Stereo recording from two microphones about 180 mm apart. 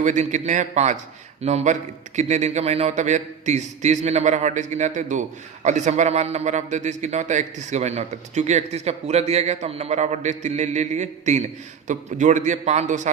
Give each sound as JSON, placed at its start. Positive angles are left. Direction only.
{"t": 0.0, "sound": "a man's voice", "side_deg": -45}